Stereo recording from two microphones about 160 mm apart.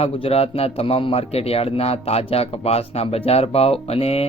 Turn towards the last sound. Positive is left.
turn(degrees=40)  # may be behind; listen again after turning